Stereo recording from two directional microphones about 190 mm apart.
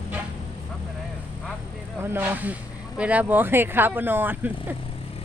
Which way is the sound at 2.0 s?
10° right (ahead or behind).